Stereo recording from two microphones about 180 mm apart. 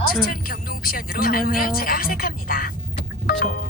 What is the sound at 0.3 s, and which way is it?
Speech, 50° left (ahead or behind).